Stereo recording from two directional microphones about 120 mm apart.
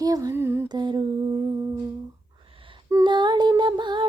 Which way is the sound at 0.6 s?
35° right (ahead or behind).